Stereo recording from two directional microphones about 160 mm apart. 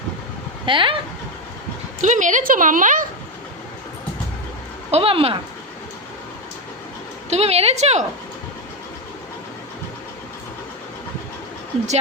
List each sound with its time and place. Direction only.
0.6 s speech: 30° right (ahead or behind)
2.0 s a woman's voice: 50° right (ahead or behind)
4.9 s a woman's voice: 40° right (ahead or behind)
7.3 s a woman's voice: 40° right (ahead or behind)